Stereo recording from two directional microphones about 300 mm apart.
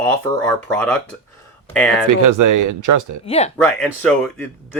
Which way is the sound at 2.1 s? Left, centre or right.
Right.